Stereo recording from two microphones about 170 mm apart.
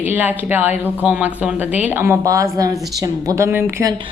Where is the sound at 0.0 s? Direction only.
10° right (ahead or behind).